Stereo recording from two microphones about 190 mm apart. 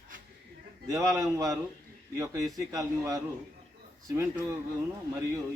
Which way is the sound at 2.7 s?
20° right (ahead or behind).